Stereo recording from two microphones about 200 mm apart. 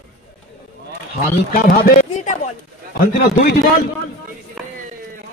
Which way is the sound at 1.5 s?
45° left (ahead or behind).